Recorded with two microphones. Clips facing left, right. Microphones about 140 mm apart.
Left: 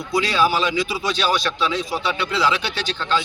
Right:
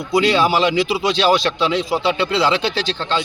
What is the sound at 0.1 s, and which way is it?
A man's voice, 25° right (ahead or behind).